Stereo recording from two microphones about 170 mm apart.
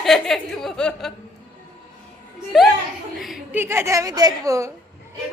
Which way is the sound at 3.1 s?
Centre (ahead or behind).